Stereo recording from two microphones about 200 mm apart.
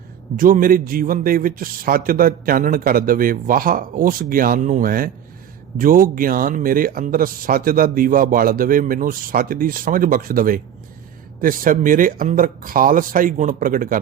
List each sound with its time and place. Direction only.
0.3 s a man's voice: 45° right (ahead or behind)